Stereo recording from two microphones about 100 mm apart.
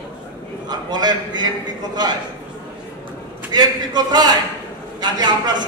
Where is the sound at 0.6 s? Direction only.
45° right (ahead or behind).